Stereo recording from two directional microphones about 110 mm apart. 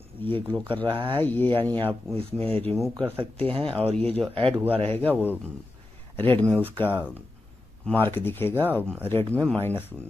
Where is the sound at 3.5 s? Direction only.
60° right (ahead or behind).